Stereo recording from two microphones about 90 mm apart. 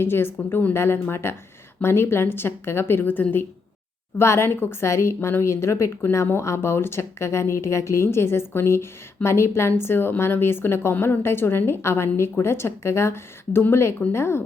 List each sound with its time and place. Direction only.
0.0 s a woman's voice: 25° left (ahead or behind)